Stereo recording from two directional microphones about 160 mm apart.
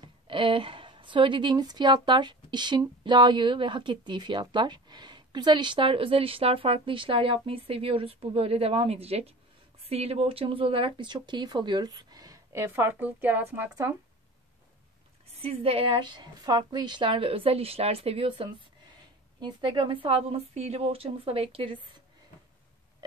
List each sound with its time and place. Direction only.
0.0 s a woman's voice: 30° right (ahead or behind); by 13.7 s 10° right (ahead or behind)
15.4 s speech: 35° right (ahead or behind)